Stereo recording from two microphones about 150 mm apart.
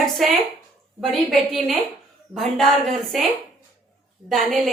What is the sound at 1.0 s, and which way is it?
A woman's voice, centre (ahead or behind).